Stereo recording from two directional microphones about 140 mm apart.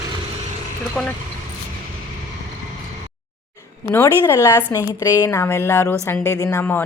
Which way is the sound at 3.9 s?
20° left (ahead or behind).